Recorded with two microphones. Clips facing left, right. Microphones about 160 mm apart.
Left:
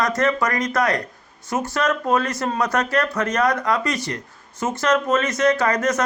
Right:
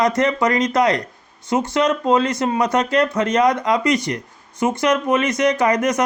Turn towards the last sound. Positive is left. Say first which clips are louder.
# right 2 dB
turn(degrees=-15)  # may be behind; listen again after turning